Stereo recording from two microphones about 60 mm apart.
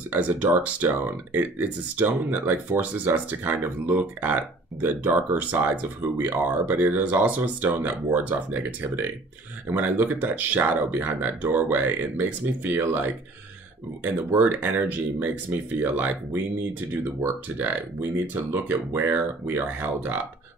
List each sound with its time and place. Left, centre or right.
0.1 s speech: right
18.2 s speech: right
18.9 s speech: right